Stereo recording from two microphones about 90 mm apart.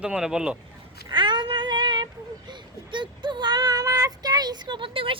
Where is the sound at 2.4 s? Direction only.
60° right (ahead or behind); by 5.2 s 80° right.